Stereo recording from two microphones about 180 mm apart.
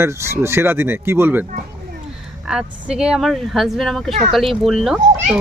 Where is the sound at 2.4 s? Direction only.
5° right (ahead or behind).